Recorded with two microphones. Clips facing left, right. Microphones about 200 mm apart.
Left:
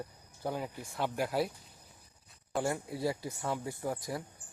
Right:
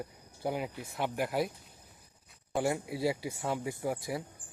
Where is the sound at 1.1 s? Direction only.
Centre (ahead or behind).